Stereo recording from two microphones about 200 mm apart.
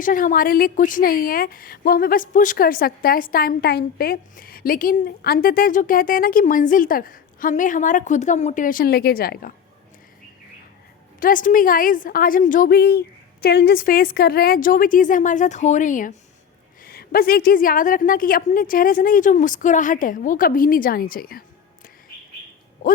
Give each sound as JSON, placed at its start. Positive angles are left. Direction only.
{"t": 0.0, "sound": "a woman's voice", "side_deg": 40}
{"t": 11.2, "sound": "a woman's voice", "side_deg": 45}